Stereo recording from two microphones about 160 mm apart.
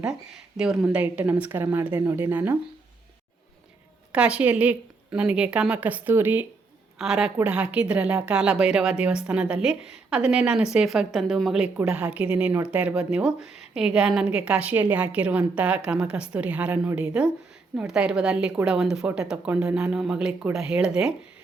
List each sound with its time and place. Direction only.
0.0 s a woman's voice: 5° right (ahead or behind)
1.0 s a woman's voice: 15° right (ahead or behind)
4.1 s a woman's voice: 5° right (ahead or behind)